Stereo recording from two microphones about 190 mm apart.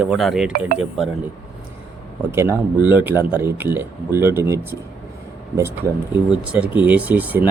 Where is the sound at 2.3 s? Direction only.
15° right (ahead or behind).